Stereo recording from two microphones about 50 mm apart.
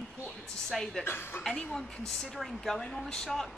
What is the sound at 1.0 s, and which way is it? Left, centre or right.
Speech, left.